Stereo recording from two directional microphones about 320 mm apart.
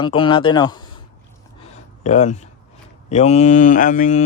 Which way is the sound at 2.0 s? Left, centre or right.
Left.